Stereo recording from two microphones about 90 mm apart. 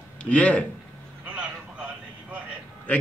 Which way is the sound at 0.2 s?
15° left (ahead or behind).